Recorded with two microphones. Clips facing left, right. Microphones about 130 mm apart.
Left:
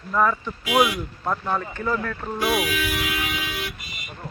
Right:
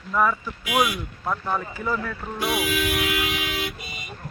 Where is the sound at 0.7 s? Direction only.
25° left (ahead or behind).